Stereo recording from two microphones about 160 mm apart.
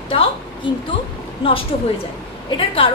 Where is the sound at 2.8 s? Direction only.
35° left (ahead or behind).